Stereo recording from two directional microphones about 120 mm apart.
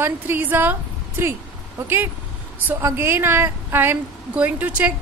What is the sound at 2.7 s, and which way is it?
A woman's voice, 20° right (ahead or behind).